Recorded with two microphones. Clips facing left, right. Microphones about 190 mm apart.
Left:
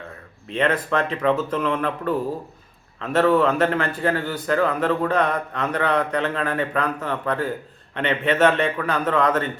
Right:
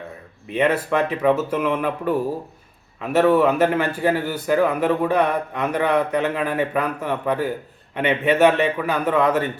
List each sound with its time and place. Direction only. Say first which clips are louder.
0.4 s a man's voice: right 2 dB; 10° right (ahead or behind)